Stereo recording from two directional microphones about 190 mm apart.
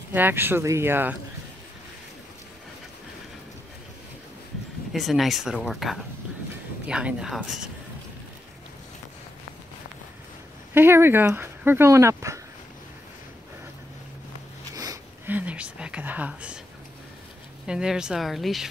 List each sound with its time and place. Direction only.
0.1 s speech: 10° right (ahead or behind)
4.9 s speech: centre (ahead or behind)
10.7 s speech: 10° right (ahead or behind)
14.8 s a sound: 20° right (ahead or behind)
15.3 s speech: 5° right (ahead or behind)
17.6 s speech: 5° right (ahead or behind)